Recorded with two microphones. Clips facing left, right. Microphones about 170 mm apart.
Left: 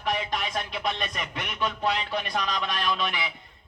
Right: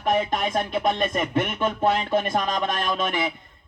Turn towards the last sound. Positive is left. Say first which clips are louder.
# right 4 dB
turn(degrees=-50)  # may be behind; listen again after turning